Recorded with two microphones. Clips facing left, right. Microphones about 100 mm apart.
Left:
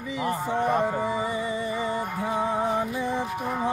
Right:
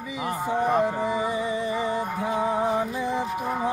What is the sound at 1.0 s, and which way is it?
Music, 15° right (ahead or behind).